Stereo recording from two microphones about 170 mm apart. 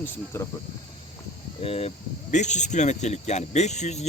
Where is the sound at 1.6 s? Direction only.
35° left (ahead or behind).